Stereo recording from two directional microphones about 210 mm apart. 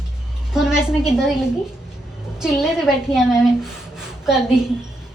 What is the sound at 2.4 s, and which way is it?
Speech, centre (ahead or behind).